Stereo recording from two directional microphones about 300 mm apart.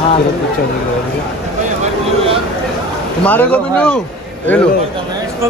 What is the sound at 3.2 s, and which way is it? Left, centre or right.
Speech, centre.